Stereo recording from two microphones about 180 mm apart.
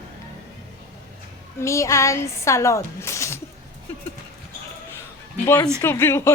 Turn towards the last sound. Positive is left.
turn(degrees=15)  # may be behind; listen again after turning